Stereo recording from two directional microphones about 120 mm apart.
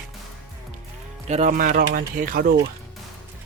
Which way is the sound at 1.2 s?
80° right.